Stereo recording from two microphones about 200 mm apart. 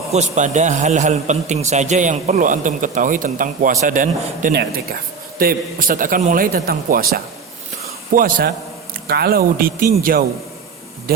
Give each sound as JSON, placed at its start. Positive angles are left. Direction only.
{"t": 0.1, "sound": "a man's voice", "side_deg": -35}